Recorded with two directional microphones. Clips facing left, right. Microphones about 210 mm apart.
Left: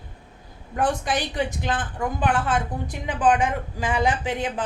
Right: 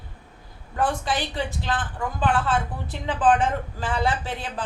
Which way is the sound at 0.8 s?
15° left (ahead or behind).